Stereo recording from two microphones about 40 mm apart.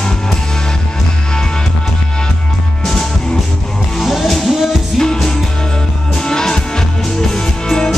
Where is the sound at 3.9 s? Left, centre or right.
Centre.